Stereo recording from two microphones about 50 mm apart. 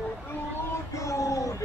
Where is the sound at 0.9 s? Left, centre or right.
Left.